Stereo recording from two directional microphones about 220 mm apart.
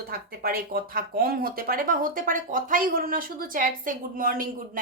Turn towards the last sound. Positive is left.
turn(degrees=-40)  # may be behind; listen again after turning